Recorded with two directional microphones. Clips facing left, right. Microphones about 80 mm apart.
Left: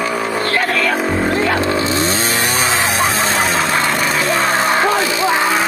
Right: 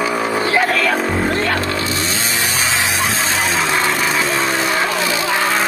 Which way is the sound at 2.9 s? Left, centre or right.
Centre.